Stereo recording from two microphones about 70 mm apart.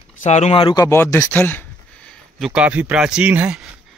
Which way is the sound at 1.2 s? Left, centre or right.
Left.